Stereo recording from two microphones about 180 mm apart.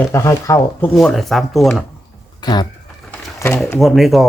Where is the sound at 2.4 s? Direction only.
25° left (ahead or behind).